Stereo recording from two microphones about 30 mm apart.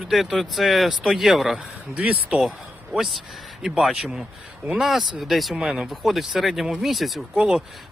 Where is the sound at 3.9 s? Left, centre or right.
Right.